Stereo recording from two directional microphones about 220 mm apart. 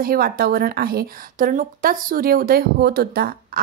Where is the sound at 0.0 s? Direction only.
40° right (ahead or behind).